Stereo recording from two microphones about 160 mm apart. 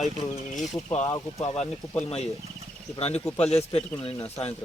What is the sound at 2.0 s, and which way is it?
Speech, 40° left (ahead or behind).